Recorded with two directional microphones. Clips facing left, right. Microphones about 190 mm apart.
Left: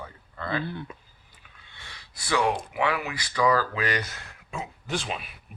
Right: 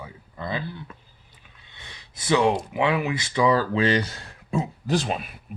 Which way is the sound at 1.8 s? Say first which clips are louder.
Right 2 dB; 20° right (ahead or behind).